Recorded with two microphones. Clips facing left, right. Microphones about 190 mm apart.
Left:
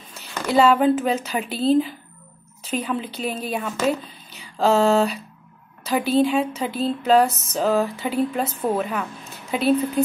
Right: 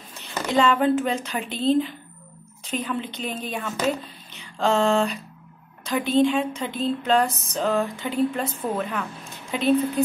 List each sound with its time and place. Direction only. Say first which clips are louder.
0.2 s a woman's voice: left 3 dB; 10° left (ahead or behind)